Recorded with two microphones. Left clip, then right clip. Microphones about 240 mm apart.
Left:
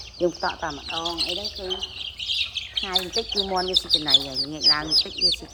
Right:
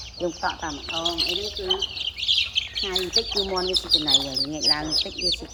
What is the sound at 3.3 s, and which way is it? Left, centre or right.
Speech, centre.